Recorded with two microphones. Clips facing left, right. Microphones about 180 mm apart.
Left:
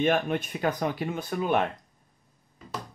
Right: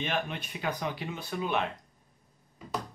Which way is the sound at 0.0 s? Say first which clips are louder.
Left 8 dB; 50° left (ahead or behind).